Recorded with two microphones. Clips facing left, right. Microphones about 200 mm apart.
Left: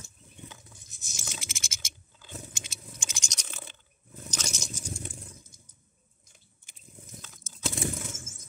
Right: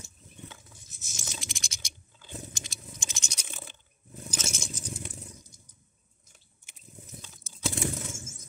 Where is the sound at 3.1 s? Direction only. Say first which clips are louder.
Even; 5° right (ahead or behind).